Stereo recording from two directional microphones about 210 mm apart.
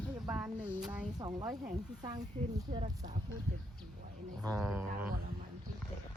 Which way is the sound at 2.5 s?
30° right (ahead or behind).